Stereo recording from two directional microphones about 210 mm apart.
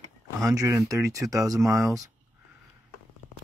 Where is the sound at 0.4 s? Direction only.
15° right (ahead or behind).